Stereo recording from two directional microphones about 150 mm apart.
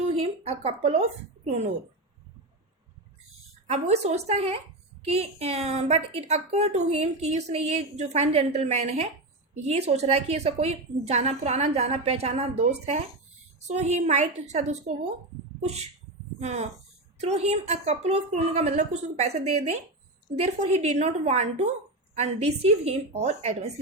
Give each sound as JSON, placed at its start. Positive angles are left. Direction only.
{"t": 0.0, "sound": "a sound", "side_deg": -40}
{"t": 1.5, "sound": "a woman's voice", "side_deg": -45}
{"t": 3.7, "sound": "a woman's voice", "side_deg": -45}